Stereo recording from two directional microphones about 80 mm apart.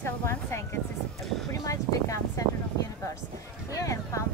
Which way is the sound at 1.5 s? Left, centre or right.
Left.